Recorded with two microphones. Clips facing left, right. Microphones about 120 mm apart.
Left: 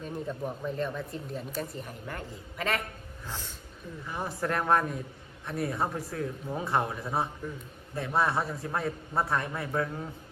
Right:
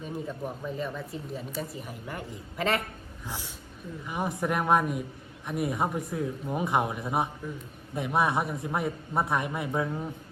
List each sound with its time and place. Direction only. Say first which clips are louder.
0.0 s speech: even; 5° right (ahead or behind)
2.6 s a man's voice: right 3 dB; 30° right (ahead or behind)
3.2 s a man's voice: right 2 dB; 10° right (ahead or behind)